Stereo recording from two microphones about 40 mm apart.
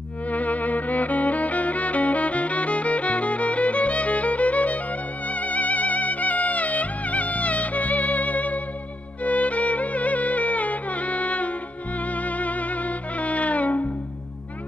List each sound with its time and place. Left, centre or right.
0.3 s music: left